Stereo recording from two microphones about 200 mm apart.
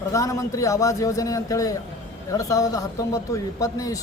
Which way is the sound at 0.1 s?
15° left (ahead or behind).